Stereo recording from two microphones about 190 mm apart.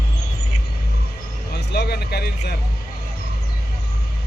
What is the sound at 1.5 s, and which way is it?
Speech, 55° left (ahead or behind).